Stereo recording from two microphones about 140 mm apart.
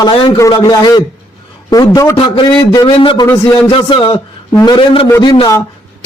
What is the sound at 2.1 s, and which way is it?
A man's voice, 40° left (ahead or behind).